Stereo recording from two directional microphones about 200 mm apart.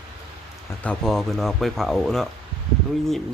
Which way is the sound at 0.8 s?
5° left (ahead or behind).